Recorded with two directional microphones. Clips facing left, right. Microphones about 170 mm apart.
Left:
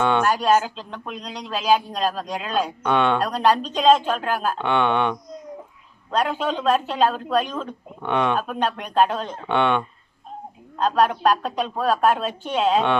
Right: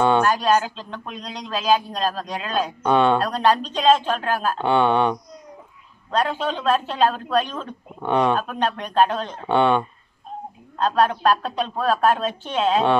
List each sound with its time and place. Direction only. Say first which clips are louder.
0.3 s speech: even; 10° left (ahead or behind)
2.8 s speech: right 4 dB; 35° right (ahead or behind)
3.3 s speech: even; 10° left (ahead or behind)
4.6 s speech: right 4 dB; 35° right (ahead or behind)
6.1 s speech: even; 10° left (ahead or behind)
8.0 s speech: right 2 dB; 35° right (ahead or behind)
8.4 s speech: even; 10° left (ahead or behind)
9.5 s speech: right 3 dB; 35° right (ahead or behind)
10.8 s speech: even; 10° left (ahead or behind)